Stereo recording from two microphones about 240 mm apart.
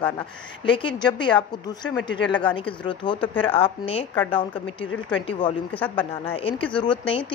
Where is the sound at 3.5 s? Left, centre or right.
Left.